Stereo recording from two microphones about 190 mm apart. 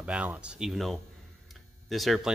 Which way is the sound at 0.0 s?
5° right (ahead or behind).